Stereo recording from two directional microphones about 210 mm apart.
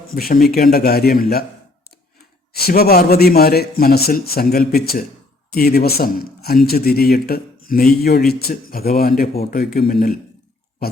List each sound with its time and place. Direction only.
0.1 s speech: 45° left (ahead or behind)
2.5 s speech: 45° left (ahead or behind)